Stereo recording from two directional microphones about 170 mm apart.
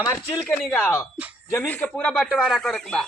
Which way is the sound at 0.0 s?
15° left (ahead or behind).